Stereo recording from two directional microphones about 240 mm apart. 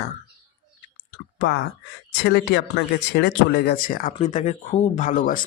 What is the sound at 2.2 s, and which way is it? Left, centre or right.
Speech, left.